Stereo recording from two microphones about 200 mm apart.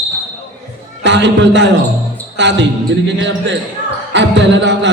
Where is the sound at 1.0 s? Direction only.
60° right (ahead or behind).